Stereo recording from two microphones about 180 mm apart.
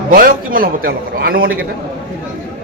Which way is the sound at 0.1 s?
55° right (ahead or behind).